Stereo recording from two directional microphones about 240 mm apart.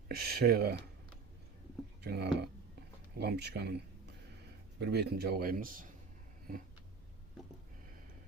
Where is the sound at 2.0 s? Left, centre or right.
Right.